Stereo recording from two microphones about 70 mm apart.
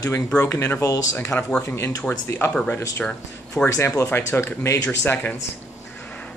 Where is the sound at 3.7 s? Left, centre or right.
Left.